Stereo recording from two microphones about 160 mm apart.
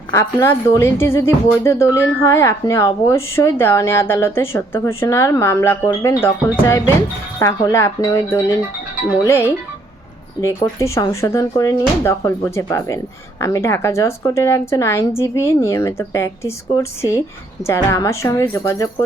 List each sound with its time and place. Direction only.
0.1 s a woman's voice: 20° left (ahead or behind)